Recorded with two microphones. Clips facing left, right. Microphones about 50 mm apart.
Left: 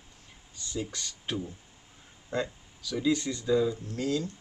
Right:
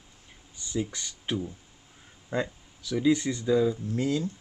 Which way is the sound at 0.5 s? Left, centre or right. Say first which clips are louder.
Right 4 dB; centre.